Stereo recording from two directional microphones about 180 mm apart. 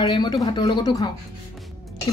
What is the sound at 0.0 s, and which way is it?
Dishes, 25° left (ahead or behind).